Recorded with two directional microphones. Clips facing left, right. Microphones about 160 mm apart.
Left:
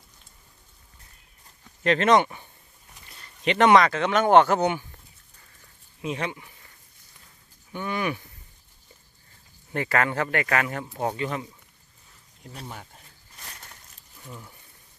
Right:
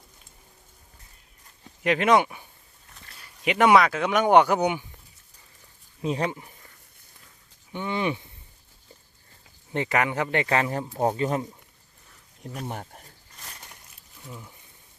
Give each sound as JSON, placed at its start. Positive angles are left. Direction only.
{"t": 1.8, "sound": "speech", "side_deg": -10}
{"t": 6.0, "sound": "speech", "side_deg": -35}
{"t": 7.7, "sound": "speech", "side_deg": -20}
{"t": 9.7, "sound": "speech", "side_deg": -20}
{"t": 12.5, "sound": "speech", "side_deg": -50}
{"t": 14.3, "sound": "speech", "side_deg": -5}